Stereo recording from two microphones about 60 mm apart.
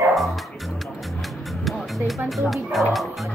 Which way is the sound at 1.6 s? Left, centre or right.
Centre.